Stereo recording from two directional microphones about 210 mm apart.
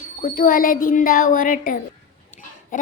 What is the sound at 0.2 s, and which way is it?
Speech, 40° left (ahead or behind).